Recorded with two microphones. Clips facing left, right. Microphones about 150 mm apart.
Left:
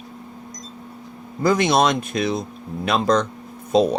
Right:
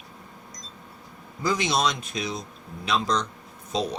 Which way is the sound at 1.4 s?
55° left (ahead or behind).